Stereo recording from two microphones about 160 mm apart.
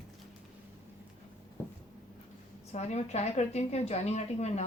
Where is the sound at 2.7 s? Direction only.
45° left (ahead or behind).